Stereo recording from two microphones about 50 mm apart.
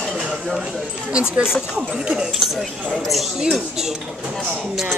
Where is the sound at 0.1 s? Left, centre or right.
Centre.